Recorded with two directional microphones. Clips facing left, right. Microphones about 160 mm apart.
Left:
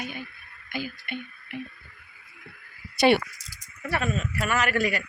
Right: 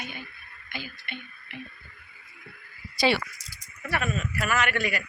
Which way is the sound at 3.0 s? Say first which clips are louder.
Left 5 dB; 55° left (ahead or behind).